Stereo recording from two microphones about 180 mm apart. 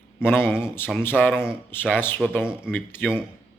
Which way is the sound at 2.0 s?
10° left (ahead or behind).